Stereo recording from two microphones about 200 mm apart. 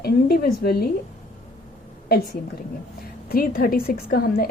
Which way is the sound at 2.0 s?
50° left (ahead or behind).